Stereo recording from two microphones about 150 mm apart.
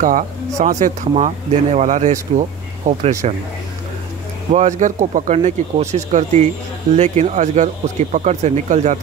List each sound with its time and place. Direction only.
0.0 s speech: 60° right (ahead or behind)
4.5 s speech: 50° right (ahead or behind)